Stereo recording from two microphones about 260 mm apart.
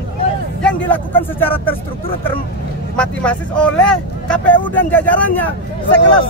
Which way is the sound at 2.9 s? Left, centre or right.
Centre.